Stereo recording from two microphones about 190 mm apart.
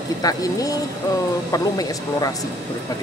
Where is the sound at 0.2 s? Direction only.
20° left (ahead or behind).